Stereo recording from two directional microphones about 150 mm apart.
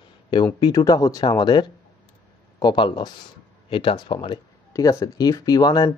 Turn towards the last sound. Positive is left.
turn(degrees=30)  # may be behind; listen again after turning